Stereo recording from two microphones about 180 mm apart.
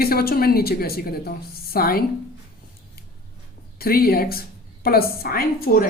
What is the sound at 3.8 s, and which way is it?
A woman's voice, 55° left (ahead or behind).